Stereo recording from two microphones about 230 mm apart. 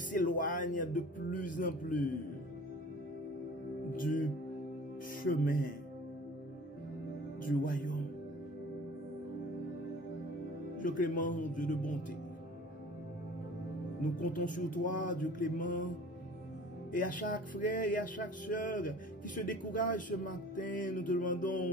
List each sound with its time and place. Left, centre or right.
0.1 s speech: left
3.9 s music: left
7.4 s music: left
10.8 s music: left
14.1 s music: left
16.9 s music: left